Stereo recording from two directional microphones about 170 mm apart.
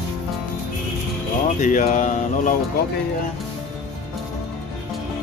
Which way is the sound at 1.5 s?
45° left (ahead or behind).